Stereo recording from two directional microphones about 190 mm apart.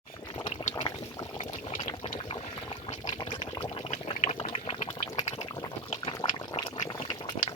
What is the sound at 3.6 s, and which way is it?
Boiling, 35° left (ahead or behind).